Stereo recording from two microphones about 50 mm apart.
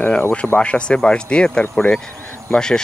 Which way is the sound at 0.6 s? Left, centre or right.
Left.